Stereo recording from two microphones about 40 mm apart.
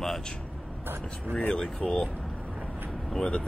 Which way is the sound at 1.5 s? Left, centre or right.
Left.